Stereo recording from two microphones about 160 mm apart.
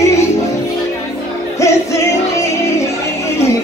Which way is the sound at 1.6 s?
20° left (ahead or behind).